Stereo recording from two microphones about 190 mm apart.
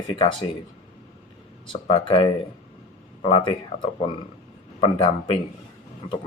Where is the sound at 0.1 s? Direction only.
25° left (ahead or behind).